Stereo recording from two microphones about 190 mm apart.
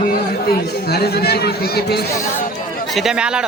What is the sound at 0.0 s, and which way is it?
Speech, 55° left (ahead or behind).